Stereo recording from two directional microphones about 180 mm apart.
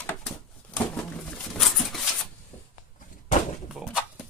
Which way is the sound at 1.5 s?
Centre (ahead or behind).